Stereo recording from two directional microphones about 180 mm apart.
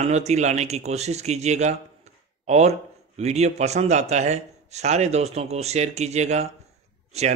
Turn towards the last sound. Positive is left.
turn(degrees=-35)  # may be behind; listen again after turning